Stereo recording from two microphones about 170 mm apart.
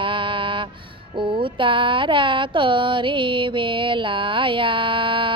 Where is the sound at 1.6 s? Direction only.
30° right (ahead or behind).